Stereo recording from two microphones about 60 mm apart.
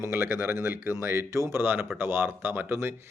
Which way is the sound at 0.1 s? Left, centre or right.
Right.